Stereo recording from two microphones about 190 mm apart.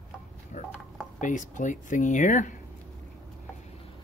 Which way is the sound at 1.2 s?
40° left (ahead or behind).